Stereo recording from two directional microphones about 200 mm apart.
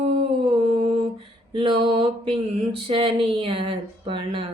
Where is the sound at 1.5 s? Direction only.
25° right (ahead or behind).